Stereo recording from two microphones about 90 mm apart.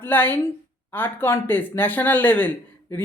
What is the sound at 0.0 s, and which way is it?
A woman's voice, 20° left (ahead or behind).